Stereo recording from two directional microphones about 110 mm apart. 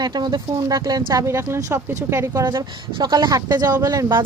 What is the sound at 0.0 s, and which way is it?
Speech, 40° right (ahead or behind).